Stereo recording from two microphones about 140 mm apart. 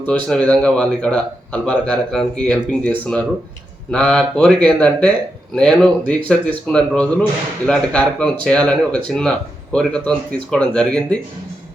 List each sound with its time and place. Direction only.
0.3 s speech: 5° left (ahead or behind)
3.9 s speech: 5° left (ahead or behind)